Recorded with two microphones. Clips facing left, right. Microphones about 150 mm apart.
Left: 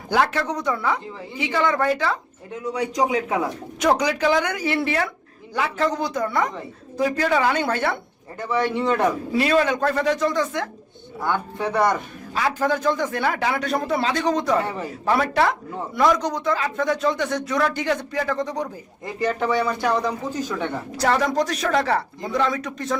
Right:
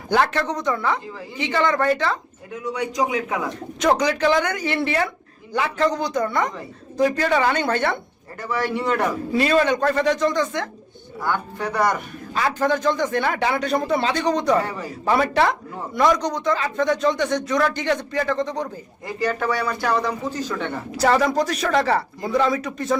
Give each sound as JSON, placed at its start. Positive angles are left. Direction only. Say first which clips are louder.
{"t": 0.1, "sound": "speech", "louder": "right 1 dB", "side_deg": 5}
{"t": 2.5, "sound": "a man's voice", "louder": "left 1 dB", "side_deg": 30}
{"t": 3.5, "sound": "a man's voice", "louder": "right 4 dB", "side_deg": 10}
{"t": 8.4, "sound": "speech", "louder": "left 2 dB", "side_deg": 20}
{"t": 9.3, "sound": "a man's voice", "louder": "right 3 dB", "side_deg": 5}
{"t": 11.2, "sound": "speech", "louder": "left 1 dB", "side_deg": 25}
{"t": 12.3, "sound": "a man's voice", "louder": "right 1 dB", "side_deg": 5}
{"t": 14.6, "sound": "speech", "louder": "left 1 dB", "side_deg": 25}
{"t": 15.0, "sound": "a man's voice", "louder": "right 1 dB", "side_deg": 0}
{"t": 19.2, "sound": "speech", "louder": "left 1 dB", "side_deg": 20}
{"t": 20.9, "sound": "a man's voice", "louder": "right 3 dB", "side_deg": -5}